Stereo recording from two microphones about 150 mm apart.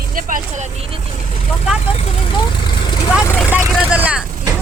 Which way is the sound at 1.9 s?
30° left (ahead or behind).